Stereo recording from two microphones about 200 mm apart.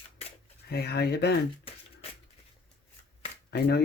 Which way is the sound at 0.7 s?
50° left (ahead or behind).